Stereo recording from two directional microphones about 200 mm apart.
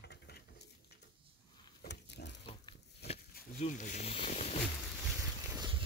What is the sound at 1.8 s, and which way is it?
Pig, 60° left (ahead or behind).